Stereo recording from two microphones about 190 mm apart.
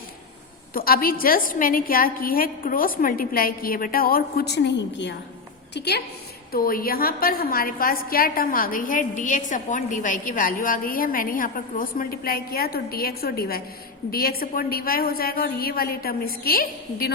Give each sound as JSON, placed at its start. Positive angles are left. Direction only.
{"t": 0.7, "sound": "a woman's voice", "side_deg": 50}
{"t": 6.5, "sound": "a woman's voice", "side_deg": 50}